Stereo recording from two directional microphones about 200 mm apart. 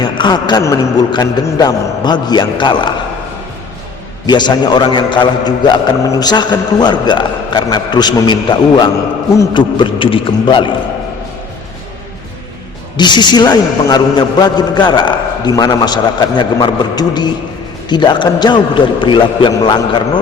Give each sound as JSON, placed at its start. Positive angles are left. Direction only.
{"t": 0.0, "sound": "a man's voice", "side_deg": 20}
{"t": 4.3, "sound": "a man's voice", "side_deg": 20}
{"t": 13.0, "sound": "a man's voice", "side_deg": 20}